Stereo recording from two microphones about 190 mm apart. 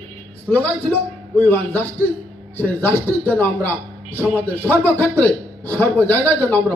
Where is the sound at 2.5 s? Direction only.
10° left (ahead or behind).